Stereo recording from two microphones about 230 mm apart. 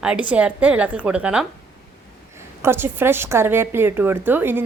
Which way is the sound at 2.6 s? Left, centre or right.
Centre.